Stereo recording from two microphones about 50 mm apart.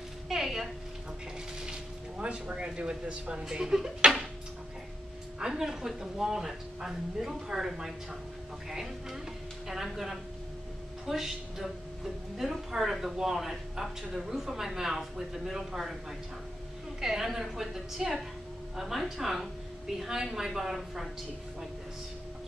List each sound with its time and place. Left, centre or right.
0.3 s a sound: centre
1.7 s a woman's voice: right
5.4 s a woman's voice: centre
17.0 s a woman's voice: centre